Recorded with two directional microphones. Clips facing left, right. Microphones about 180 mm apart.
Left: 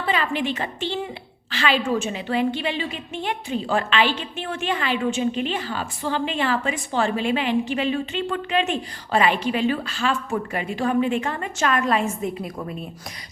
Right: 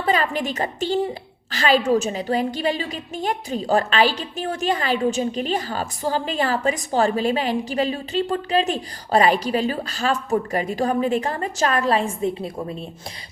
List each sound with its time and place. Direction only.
0.0 s a woman's voice: 40° right (ahead or behind)